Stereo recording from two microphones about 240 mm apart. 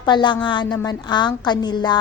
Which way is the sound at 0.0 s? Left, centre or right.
Centre.